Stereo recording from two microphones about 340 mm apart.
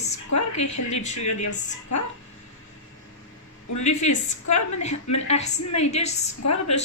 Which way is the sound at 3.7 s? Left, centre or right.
Left.